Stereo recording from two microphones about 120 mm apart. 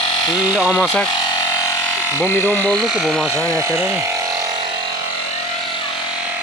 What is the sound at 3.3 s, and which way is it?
Speech, 25° right (ahead or behind).